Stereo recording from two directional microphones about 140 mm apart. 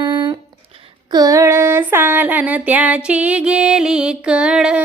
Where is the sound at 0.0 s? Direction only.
35° right (ahead or behind).